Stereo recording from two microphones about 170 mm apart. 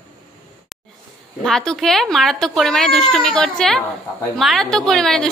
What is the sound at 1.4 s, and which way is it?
Speech, 5° left (ahead or behind).